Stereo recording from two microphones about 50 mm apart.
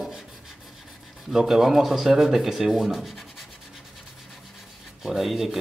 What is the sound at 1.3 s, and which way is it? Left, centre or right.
Speech, centre.